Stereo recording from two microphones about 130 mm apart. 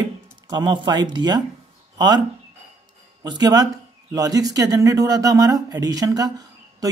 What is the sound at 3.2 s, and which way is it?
Speech, 30° right (ahead or behind).